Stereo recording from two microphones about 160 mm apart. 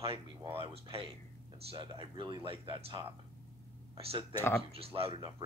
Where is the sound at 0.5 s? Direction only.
35° right (ahead or behind).